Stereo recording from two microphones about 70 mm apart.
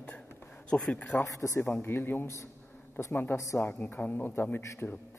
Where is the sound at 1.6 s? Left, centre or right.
Left.